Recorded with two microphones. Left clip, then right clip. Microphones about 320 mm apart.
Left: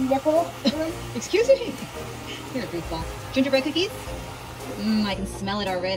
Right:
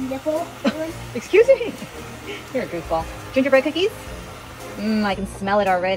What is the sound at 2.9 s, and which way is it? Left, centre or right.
Speech, right.